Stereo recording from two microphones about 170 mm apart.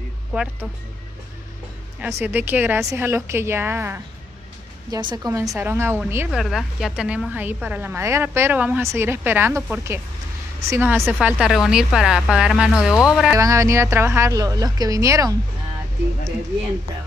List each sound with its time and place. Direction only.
0.3 s speech: 5° right (ahead or behind)
2.0 s a woman's voice: 10° right (ahead or behind)
6.3 s a woman's voice: centre (ahead or behind)
13.4 s speech: 20° right (ahead or behind)